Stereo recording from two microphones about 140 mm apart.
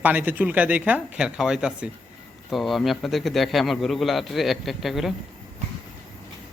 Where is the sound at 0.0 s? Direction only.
10° right (ahead or behind).